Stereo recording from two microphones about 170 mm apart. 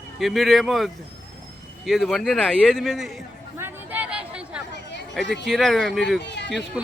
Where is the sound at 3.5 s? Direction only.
10° right (ahead or behind).